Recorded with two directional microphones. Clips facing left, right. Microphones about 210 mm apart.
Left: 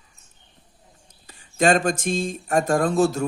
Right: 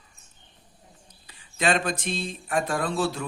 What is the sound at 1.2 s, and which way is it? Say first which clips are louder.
Speech: left 6 dB; 45° left (ahead or behind).